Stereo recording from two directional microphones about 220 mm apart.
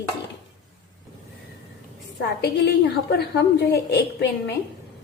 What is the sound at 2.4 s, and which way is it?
A woman's voice, 50° left (ahead or behind).